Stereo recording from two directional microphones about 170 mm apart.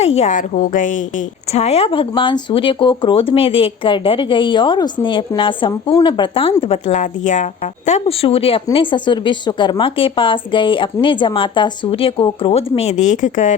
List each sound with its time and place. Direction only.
0.0 s a woman's voice: 45° left (ahead or behind)
1.5 s a woman's voice: 40° left (ahead or behind)